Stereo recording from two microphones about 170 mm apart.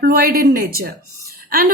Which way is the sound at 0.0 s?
60° right (ahead or behind).